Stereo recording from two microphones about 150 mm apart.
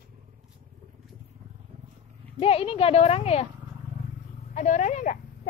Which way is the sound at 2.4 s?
40° left (ahead or behind).